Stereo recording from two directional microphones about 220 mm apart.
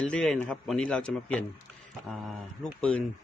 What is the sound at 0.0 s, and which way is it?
Speech, 5° left (ahead or behind).